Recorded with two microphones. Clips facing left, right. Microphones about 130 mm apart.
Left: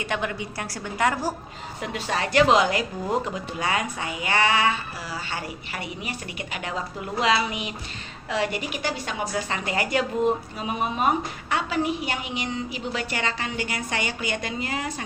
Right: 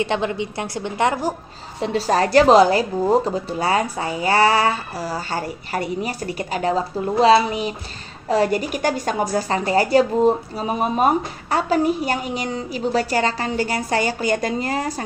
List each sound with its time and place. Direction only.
0.0 s a woman's voice: 25° right (ahead or behind)
1.8 s a woman's voice: 35° right (ahead or behind)